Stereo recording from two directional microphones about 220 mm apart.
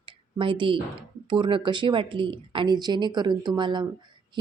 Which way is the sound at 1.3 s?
20° right (ahead or behind).